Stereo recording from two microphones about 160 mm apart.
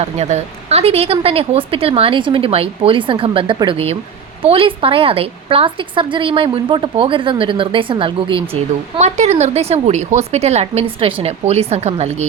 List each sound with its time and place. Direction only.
0.0 s a woman's voice: 45° right (ahead or behind)
9.0 s a woman's voice: 45° right (ahead or behind)